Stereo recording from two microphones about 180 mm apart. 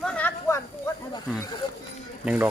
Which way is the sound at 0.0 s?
5° left (ahead or behind).